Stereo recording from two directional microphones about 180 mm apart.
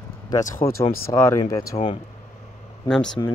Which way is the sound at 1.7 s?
30° left (ahead or behind).